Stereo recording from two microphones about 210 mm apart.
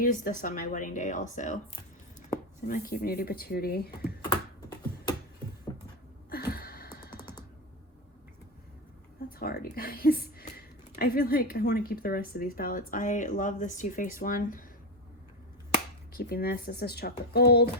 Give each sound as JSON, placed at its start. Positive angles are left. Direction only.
{"t": 0.0, "sound": "a woman's voice", "side_deg": 40}
{"t": 4.2, "sound": "computer keyboard", "side_deg": 20}
{"t": 6.3, "sound": "a sound", "side_deg": 45}
{"t": 9.4, "sound": "a woman's voice", "side_deg": 45}
{"t": 16.1, "sound": "speech", "side_deg": 45}